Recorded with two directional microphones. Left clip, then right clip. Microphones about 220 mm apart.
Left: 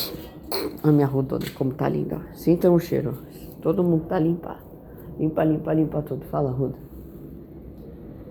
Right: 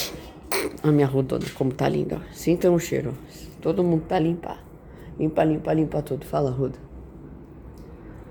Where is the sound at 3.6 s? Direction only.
25° right (ahead or behind).